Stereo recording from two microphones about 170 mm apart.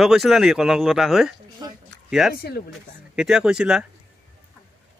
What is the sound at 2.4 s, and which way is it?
Speech, 65° left (ahead or behind).